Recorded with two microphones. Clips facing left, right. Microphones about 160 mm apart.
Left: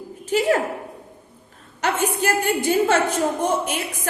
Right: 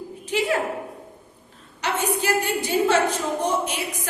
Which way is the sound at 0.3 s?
45° left (ahead or behind).